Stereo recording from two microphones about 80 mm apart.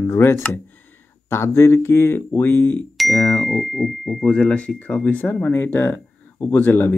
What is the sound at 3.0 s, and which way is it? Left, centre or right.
Speech, centre.